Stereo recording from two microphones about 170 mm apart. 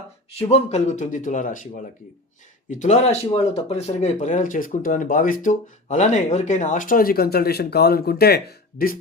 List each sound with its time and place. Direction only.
0.5 s speech: 40° left (ahead or behind); by 9.0 s 65° left (ahead or behind)